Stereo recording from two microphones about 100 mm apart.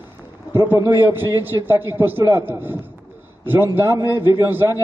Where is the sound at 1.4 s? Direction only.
20° right (ahead or behind).